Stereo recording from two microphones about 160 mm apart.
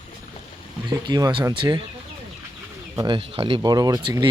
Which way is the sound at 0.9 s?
25° right (ahead or behind).